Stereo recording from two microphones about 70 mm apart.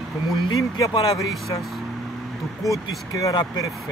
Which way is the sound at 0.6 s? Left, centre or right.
Left.